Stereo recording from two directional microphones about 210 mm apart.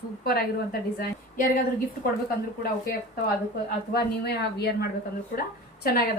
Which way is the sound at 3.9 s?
50° left (ahead or behind).